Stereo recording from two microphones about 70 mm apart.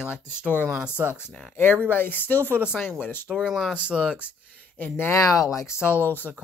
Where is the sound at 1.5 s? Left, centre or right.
Left.